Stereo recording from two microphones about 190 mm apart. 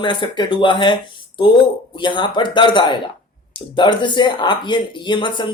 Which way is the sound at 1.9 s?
25° left (ahead or behind).